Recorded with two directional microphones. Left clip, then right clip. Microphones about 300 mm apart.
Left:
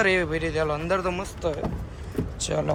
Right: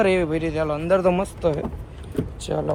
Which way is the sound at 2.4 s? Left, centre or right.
Centre.